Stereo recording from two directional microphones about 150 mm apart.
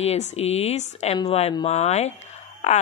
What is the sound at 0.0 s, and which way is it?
Speech, 45° left (ahead or behind).